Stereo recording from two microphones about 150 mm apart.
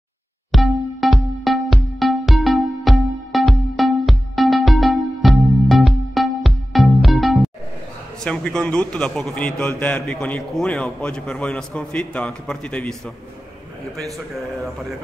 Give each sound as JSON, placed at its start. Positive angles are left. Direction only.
{"t": 0.5, "sound": "music", "side_deg": 0}
{"t": 8.2, "sound": "a man's voice", "side_deg": 5}